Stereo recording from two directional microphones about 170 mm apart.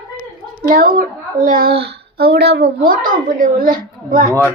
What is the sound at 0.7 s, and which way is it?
A child's voice, 60° right (ahead or behind).